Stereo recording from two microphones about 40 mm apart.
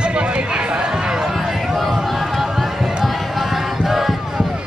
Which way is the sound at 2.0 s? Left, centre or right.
Centre.